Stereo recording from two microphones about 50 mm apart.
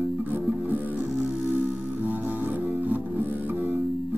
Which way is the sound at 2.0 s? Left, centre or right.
Right.